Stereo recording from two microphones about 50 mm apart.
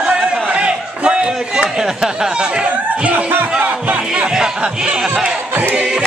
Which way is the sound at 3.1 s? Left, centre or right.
Right.